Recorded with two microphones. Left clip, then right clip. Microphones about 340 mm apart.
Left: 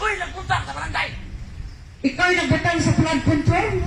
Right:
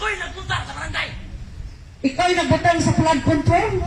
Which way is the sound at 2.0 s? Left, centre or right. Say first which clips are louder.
Right 1 dB; right.